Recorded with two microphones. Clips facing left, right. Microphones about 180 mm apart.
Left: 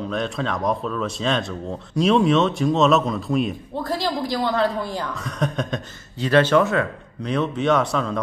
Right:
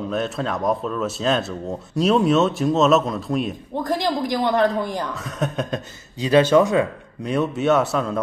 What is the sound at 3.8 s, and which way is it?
Speech, 15° right (ahead or behind).